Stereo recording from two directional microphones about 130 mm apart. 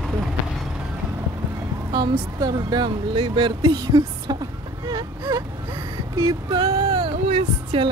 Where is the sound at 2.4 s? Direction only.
35° right (ahead or behind).